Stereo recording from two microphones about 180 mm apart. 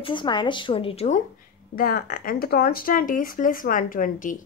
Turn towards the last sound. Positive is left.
turn(degrees=50)  # may be behind; listen again after turning